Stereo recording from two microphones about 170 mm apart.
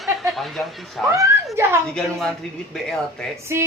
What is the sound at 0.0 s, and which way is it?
Speech, centre (ahead or behind).